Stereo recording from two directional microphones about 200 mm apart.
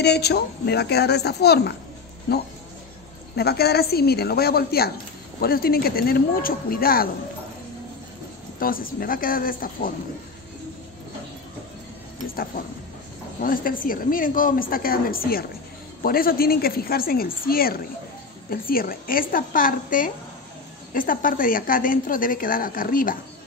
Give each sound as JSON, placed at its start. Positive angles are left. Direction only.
{"t": 0.0, "sound": "a child's voice", "side_deg": 55}
{"t": 3.3, "sound": "a woman's voice", "side_deg": 50}
{"t": 8.5, "sound": "a woman's voice", "side_deg": 45}
{"t": 13.4, "sound": "a woman's voice", "side_deg": 45}